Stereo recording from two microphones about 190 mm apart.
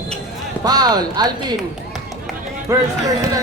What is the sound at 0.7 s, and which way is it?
Speech, 20° right (ahead or behind).